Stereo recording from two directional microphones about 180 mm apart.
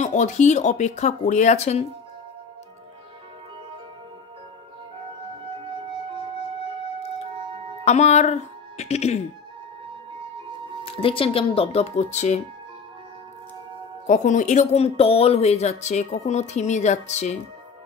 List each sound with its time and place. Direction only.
0.0 s speech: 40° left (ahead or behind)
7.8 s speech: 40° left (ahead or behind)
10.9 s speech: 30° left (ahead or behind)
14.0 s speech: 45° left (ahead or behind)